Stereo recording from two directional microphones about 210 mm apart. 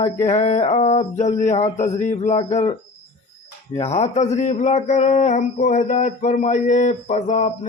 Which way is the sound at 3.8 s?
30° left (ahead or behind).